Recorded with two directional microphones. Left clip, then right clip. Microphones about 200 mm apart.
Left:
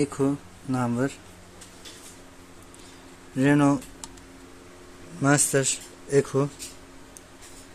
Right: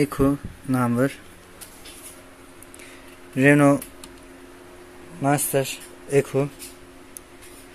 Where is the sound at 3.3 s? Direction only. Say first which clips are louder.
Right 5 dB; 15° right (ahead or behind).